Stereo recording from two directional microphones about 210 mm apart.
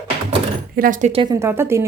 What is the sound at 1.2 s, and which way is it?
Speech, 15° right (ahead or behind).